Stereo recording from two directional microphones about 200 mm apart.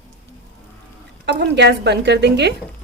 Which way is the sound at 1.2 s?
60° right (ahead or behind).